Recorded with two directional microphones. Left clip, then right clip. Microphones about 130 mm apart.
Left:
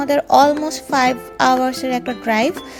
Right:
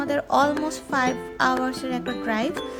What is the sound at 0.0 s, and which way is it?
Music, 35° left (ahead or behind).